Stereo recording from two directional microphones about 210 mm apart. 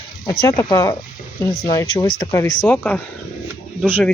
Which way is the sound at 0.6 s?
20° left (ahead or behind).